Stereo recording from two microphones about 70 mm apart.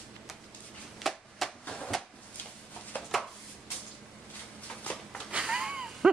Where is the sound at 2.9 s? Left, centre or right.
Left.